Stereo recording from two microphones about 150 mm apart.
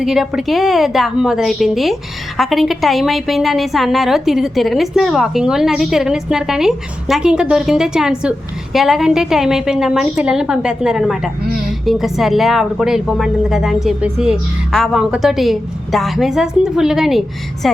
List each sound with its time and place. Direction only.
0.0 s a woman's voice: centre (ahead or behind)